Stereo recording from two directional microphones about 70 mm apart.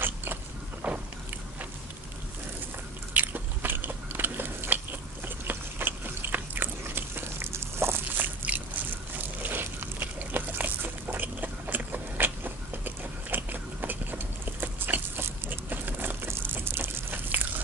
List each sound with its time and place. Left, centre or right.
0.0 s vehicle: right
0.8 s biting: centre
3.1 s biting: right
8.5 s a sound: right